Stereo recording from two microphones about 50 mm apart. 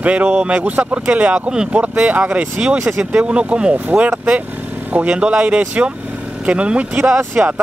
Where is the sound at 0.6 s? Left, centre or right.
Right.